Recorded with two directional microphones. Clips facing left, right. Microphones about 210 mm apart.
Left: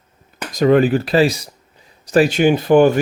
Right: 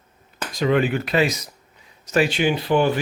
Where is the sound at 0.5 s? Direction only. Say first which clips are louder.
Left 7 dB; 40° left (ahead or behind).